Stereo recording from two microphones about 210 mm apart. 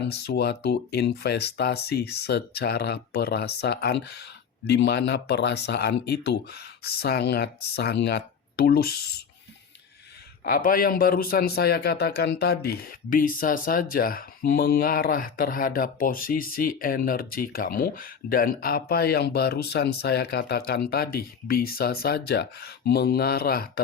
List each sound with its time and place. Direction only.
0.1 s a man's voice: 50° left (ahead or behind)
10.4 s a man's voice: 40° left (ahead or behind)